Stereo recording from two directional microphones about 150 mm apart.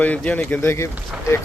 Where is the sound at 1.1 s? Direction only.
5° right (ahead or behind).